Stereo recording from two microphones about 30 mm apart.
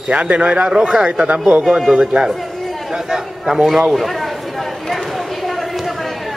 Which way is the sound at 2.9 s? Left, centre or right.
Centre.